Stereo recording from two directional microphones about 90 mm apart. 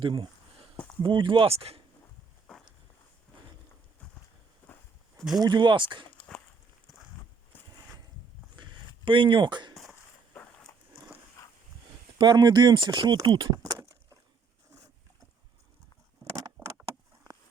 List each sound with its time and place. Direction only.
0.0 s speech: 70° right (ahead or behind); by 1.8 s 90° right
5.4 s speech: 50° right (ahead or behind)
7.5 s a sound: 20° left (ahead or behind)
8.5 s a sound: 55° right (ahead or behind)
9.0 s speech: 65° right (ahead or behind)
12.1 s speech: 55° right (ahead or behind)
13.6 s keys jangling: 40° right (ahead or behind)
16.6 s vehicle: 20° right (ahead or behind)